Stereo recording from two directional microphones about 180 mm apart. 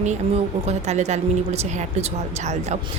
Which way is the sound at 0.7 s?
40° right (ahead or behind).